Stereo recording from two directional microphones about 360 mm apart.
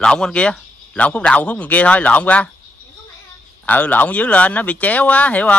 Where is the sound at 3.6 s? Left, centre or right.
Centre.